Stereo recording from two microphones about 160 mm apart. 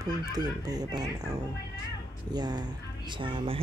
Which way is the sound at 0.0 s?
25° right (ahead or behind).